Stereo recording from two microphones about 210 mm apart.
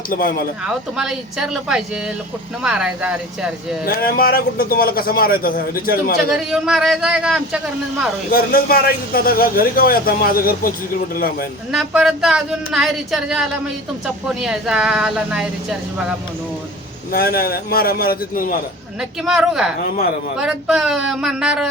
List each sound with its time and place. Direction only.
0.1 s a man's voice: 45° left (ahead or behind)
0.6 s a woman's voice: centre (ahead or behind)
3.8 s a man's voice: 45° left (ahead or behind)
6.3 s a woman's voice: centre (ahead or behind)
8.3 s a man's voice: 45° left (ahead or behind)
11.7 s a woman's voice: centre (ahead or behind)
17.1 s a man's voice: 45° left (ahead or behind)
19.2 s a woman's voice: centre (ahead or behind)